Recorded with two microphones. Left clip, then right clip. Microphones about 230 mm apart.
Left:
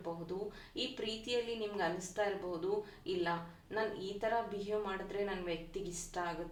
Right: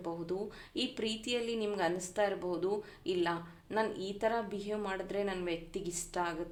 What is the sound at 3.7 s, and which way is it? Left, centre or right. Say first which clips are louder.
Speech: right 4 dB; right.